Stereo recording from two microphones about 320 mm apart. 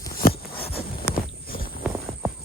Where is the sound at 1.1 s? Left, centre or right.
Left.